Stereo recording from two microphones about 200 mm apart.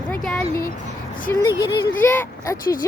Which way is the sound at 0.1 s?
5° left (ahead or behind).